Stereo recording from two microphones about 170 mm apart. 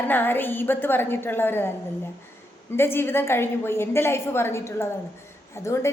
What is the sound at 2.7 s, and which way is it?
A woman's voice, 15° left (ahead or behind).